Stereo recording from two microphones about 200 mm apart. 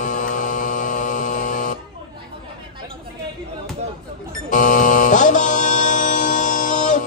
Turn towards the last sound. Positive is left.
turn(degrees=40)  # may be behind; listen again after turning